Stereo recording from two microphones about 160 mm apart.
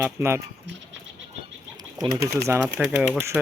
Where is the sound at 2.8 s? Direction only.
10° right (ahead or behind).